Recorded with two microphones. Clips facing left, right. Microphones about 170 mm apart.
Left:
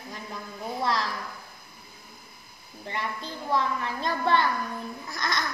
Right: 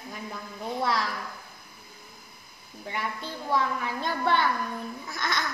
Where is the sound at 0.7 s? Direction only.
Centre (ahead or behind).